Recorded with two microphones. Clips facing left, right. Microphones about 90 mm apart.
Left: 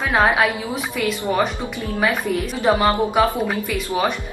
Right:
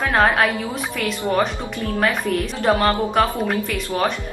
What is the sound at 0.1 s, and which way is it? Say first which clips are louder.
Speech: left 1 dB; 5° left (ahead or behind).